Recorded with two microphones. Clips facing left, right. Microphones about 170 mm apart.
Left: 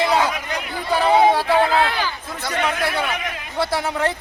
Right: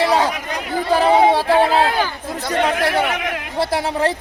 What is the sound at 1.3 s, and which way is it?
Speech, 30° right (ahead or behind).